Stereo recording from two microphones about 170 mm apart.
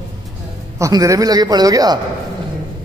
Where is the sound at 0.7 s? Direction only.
20° right (ahead or behind).